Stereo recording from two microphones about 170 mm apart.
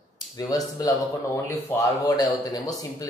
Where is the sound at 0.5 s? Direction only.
20° left (ahead or behind).